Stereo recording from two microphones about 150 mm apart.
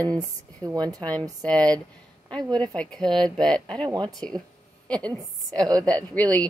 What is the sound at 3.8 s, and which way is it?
Speech, 30° right (ahead or behind).